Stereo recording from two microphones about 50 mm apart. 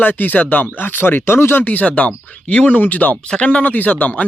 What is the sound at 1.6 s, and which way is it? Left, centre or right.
Speech, left.